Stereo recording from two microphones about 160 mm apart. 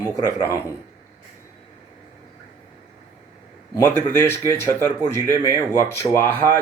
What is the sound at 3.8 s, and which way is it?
Speech, 15° left (ahead or behind).